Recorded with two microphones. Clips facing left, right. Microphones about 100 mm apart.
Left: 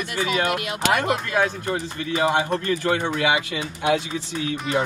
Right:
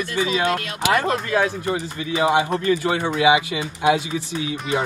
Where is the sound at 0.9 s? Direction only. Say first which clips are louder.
Right 2 dB; 15° left (ahead or behind).